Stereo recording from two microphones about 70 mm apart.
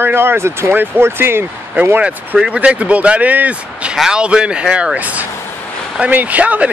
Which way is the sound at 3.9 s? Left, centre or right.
Centre.